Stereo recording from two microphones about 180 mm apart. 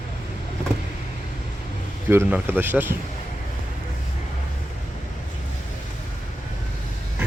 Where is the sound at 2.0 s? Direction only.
10° right (ahead or behind).